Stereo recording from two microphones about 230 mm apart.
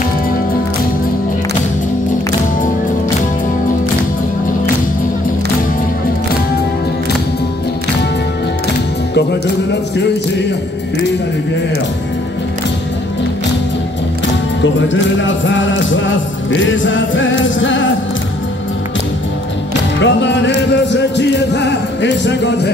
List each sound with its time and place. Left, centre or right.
14.6 s music: left
19.7 s music: left